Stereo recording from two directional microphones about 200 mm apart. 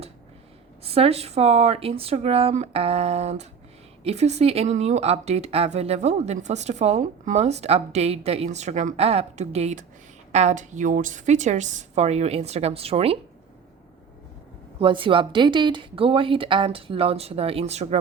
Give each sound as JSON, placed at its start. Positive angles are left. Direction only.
{"t": 0.9, "sound": "speech", "side_deg": -30}
{"t": 14.8, "sound": "speech", "side_deg": -25}